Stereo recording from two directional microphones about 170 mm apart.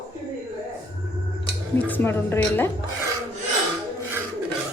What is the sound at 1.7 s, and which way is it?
Speech, 10° left (ahead or behind).